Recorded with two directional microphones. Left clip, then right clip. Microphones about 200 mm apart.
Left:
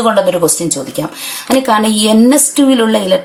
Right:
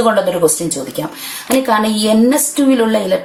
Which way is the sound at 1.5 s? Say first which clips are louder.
Left 3 dB; 30° left (ahead or behind).